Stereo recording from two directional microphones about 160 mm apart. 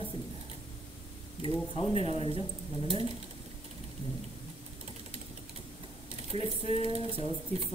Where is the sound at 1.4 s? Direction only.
35° left (ahead or behind).